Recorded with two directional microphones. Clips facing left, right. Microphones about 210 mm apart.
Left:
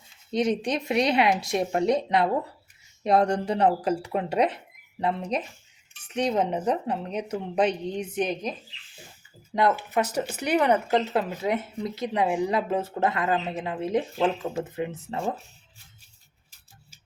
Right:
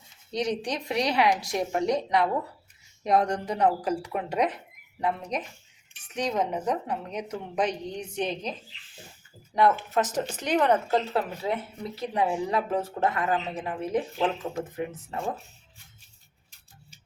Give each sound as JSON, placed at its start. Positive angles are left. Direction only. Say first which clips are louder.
{"t": 0.3, "sound": "speech", "louder": "left 4 dB", "side_deg": 25}
{"t": 9.7, "sound": "speech", "louder": "left 1 dB", "side_deg": 10}